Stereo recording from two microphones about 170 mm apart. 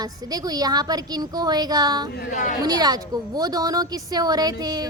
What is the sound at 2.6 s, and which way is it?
Speech, 25° right (ahead or behind).